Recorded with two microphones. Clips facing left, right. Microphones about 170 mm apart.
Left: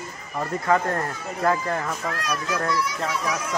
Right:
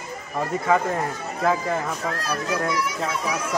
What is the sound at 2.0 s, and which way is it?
Speech, 30° right (ahead or behind).